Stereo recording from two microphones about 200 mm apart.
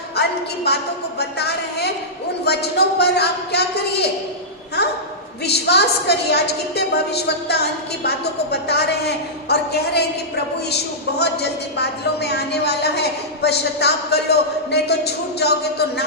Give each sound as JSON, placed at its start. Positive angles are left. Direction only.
{"t": 0.2, "sound": "a woman's voice", "side_deg": 55}
{"t": 5.4, "sound": "a woman's voice", "side_deg": 55}
{"t": 11.2, "sound": "a woman's voice", "side_deg": 55}